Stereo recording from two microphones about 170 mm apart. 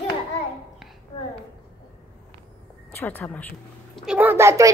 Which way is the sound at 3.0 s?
10° left (ahead or behind).